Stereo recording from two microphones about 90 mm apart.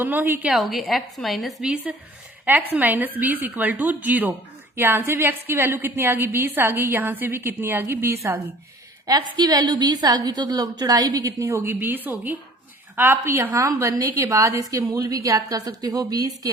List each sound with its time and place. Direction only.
0.0 s a woman's voice: 20° right (ahead or behind)
0.5 s a woman's voice: centre (ahead or behind)
2.4 s a woman's voice: 20° right (ahead or behind)
9.0 s a woman's voice: 50° right (ahead or behind)